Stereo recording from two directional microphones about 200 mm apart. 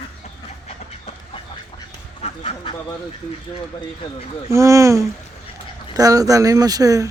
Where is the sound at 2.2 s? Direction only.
30° left (ahead or behind).